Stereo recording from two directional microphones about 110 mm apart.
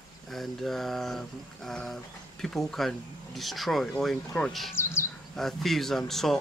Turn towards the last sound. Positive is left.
turn(degrees=0)  # may be behind; listen again after turning